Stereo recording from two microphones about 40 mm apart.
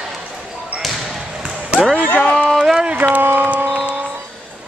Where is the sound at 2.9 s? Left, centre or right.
Right.